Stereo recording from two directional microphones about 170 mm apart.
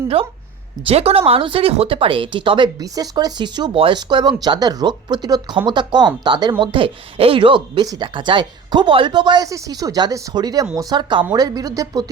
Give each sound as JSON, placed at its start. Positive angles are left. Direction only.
{"t": 0.1, "sound": "speech", "side_deg": -35}